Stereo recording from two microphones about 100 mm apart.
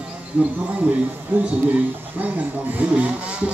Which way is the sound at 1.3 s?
20° right (ahead or behind).